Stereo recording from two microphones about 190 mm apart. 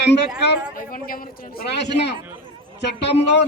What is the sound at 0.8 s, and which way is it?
A man's voice, 50° left (ahead or behind).